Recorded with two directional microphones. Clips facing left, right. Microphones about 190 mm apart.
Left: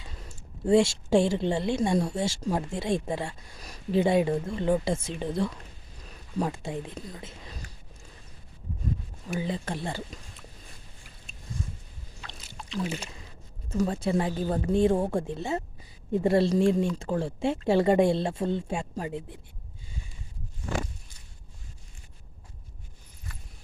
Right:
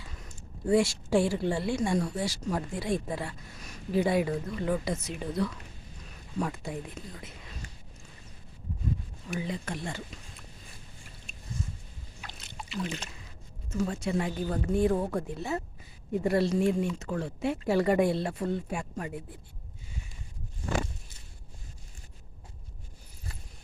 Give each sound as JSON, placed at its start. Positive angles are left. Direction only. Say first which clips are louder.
{"t": 0.7, "sound": "a woman's voice", "louder": "left 3 dB", "side_deg": 25}
{"t": 9.4, "sound": "speech", "louder": "left 3 dB", "side_deg": 30}
{"t": 12.4, "sound": "boat", "louder": "left 3 dB", "side_deg": -5}
{"t": 13.7, "sound": "a woman's voice", "louder": "left 4 dB", "side_deg": 35}